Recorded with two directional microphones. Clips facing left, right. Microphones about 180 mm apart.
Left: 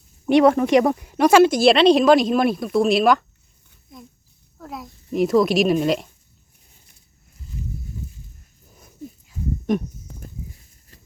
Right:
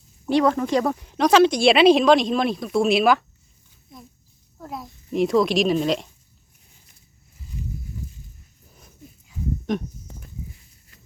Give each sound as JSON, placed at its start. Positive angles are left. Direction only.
{"t": 0.3, "sound": "speech", "side_deg": 20}
{"t": 4.5, "sound": "speech", "side_deg": 0}
{"t": 9.2, "sound": "a sound", "side_deg": 5}